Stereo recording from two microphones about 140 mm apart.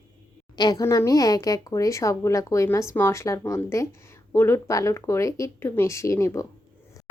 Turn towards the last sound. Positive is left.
turn(degrees=20)  # may be behind; listen again after turning